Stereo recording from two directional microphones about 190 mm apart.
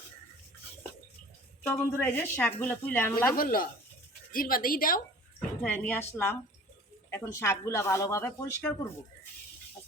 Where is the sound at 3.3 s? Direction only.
50° left (ahead or behind).